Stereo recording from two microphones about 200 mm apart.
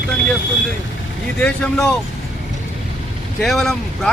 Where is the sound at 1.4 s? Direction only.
5° left (ahead or behind).